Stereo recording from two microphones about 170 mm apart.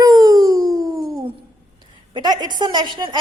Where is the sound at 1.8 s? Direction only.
25° right (ahead or behind).